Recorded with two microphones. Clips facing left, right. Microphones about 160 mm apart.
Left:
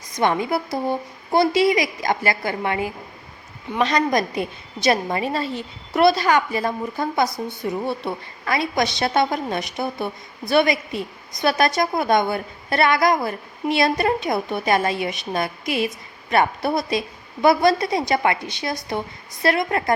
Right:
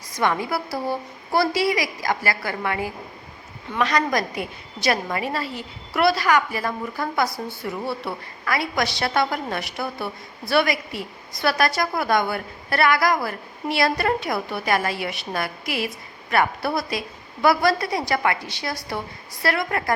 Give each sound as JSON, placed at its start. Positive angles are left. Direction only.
{"t": 0.1, "sound": "a woman's voice", "side_deg": 20}